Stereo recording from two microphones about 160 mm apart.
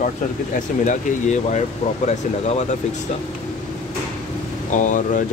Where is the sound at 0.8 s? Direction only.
50° left (ahead or behind).